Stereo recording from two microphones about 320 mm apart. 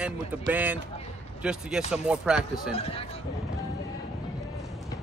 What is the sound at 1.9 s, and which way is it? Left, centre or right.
Speech, centre.